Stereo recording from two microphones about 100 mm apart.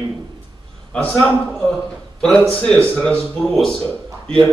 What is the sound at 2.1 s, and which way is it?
A man's voice, 5° left (ahead or behind).